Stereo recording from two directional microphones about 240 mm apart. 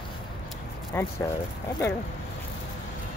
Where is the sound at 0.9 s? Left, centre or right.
Centre.